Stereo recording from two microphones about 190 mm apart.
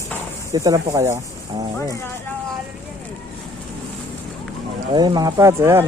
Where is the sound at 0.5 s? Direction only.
15° right (ahead or behind).